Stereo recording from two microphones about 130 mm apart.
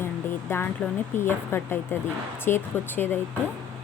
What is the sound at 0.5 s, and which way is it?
A woman's voice, 20° left (ahead or behind).